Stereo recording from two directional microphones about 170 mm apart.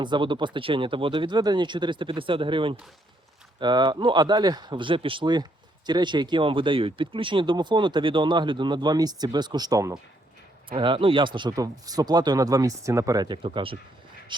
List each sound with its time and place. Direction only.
0.0 s speech: 30° right (ahead or behind)